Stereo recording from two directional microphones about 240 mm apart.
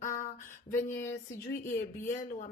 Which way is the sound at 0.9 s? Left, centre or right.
Centre.